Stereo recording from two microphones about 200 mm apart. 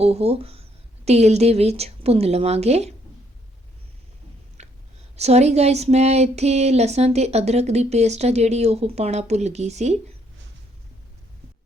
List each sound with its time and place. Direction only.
0.0 s a woman's voice: 30° right (ahead or behind)
4.6 s a sound: 35° right (ahead or behind)
5.1 s speech: 30° right (ahead or behind)